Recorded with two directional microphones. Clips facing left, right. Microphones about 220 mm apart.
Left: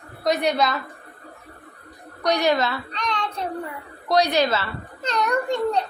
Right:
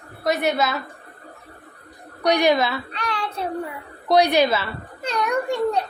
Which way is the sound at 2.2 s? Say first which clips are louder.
Right 2 dB; 15° right (ahead or behind).